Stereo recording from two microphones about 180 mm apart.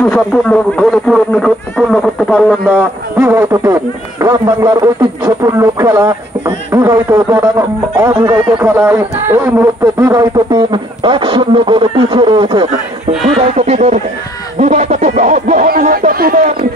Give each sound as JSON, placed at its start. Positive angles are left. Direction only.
{"t": 0.1, "sound": "speech", "side_deg": 5}
{"t": 2.7, "sound": "a man's voice", "side_deg": -10}
{"t": 7.5, "sound": "music", "side_deg": -20}
{"t": 8.6, "sound": "a man's voice", "side_deg": -10}
{"t": 13.6, "sound": "a sound", "side_deg": -40}
{"t": 14.6, "sound": "music", "side_deg": -40}
{"t": 15.6, "sound": "a sound", "side_deg": -55}